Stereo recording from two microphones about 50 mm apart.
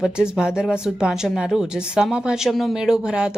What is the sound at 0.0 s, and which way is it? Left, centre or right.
Speech, centre.